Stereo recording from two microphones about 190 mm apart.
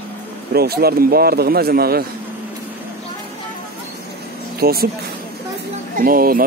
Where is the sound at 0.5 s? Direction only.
55° right (ahead or behind).